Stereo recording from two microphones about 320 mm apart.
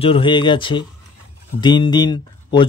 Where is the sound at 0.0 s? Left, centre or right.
Centre.